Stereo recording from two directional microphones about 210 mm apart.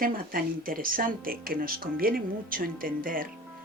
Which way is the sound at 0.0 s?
45° right (ahead or behind).